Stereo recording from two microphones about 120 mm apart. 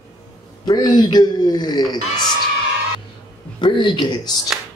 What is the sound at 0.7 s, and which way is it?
Speech, 35° left (ahead or behind).